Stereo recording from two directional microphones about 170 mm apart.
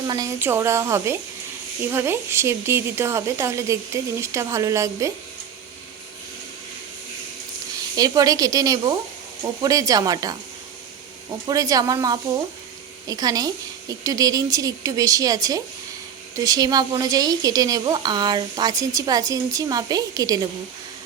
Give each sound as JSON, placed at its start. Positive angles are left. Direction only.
{"t": 0.1, "sound": "speech", "side_deg": -20}
{"t": 7.9, "sound": "a woman's voice", "side_deg": -20}